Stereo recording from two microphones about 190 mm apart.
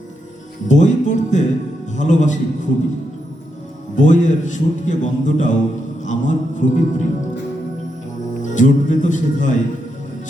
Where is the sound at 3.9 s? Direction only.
40° left (ahead or behind).